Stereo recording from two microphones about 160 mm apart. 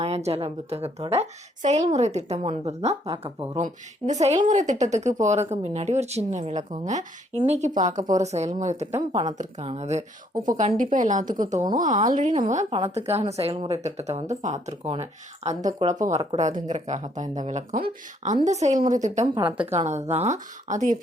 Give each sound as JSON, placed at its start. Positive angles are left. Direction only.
{"t": 0.0, "sound": "a woman's voice", "side_deg": -40}
{"t": 12.7, "sound": "a woman's voice", "side_deg": -35}
{"t": 17.7, "sound": "speech", "side_deg": -65}
{"t": 18.4, "sound": "speech", "side_deg": -45}
{"t": 19.2, "sound": "a woman's voice", "side_deg": -30}
{"t": 19.8, "sound": "speech", "side_deg": -45}